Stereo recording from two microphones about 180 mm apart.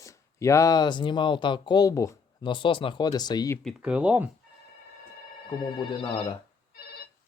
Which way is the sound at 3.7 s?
5° right (ahead or behind).